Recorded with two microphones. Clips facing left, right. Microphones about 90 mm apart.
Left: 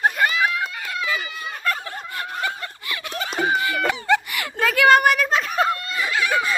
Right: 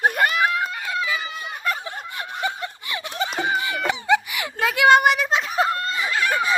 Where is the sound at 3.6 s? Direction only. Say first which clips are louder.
Left 2 dB; 20° right (ahead or behind).